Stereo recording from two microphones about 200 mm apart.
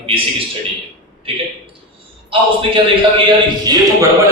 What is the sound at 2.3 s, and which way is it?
A man's voice, 25° right (ahead or behind).